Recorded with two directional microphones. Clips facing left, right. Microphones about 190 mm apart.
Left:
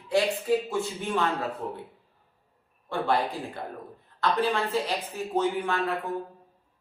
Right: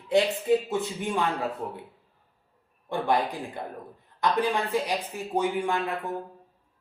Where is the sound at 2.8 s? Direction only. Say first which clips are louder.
Right 1 dB; 15° right (ahead or behind).